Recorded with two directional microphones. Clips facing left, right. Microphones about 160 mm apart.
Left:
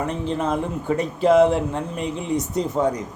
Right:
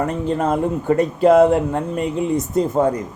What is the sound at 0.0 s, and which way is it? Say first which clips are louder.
A man's voice: right 4 dB; 50° right (ahead or behind).